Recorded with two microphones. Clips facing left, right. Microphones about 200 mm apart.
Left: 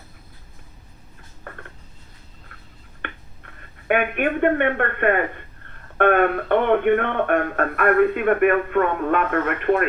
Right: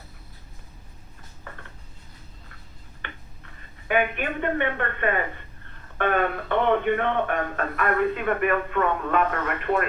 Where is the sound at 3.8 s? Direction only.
60° left (ahead or behind).